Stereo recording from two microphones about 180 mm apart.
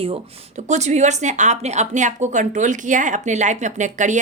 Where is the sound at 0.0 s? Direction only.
35° right (ahead or behind).